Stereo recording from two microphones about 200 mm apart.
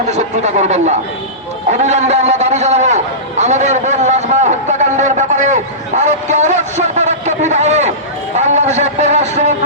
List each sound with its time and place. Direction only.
0.1 s a man's voice: 35° right (ahead or behind)
6.0 s a sound: 35° right (ahead or behind)
8.4 s a man's voice: 35° right (ahead or behind)